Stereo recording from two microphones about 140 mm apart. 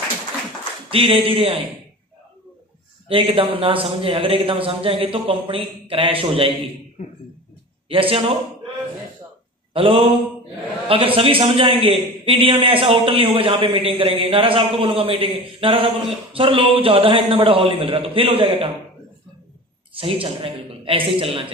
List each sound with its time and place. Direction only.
0.8 s a man's voice: 40° right (ahead or behind)
3.1 s a man's voice: 40° right (ahead or behind)
7.9 s a man's voice: 40° right (ahead or behind)
9.8 s a man's voice: 40° right (ahead or behind)
19.9 s a man's voice: 40° right (ahead or behind)